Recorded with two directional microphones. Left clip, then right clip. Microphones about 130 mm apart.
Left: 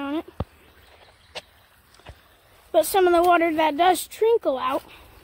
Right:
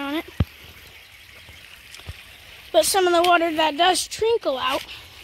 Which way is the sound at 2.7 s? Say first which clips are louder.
Right 2 dB; 10° left (ahead or behind).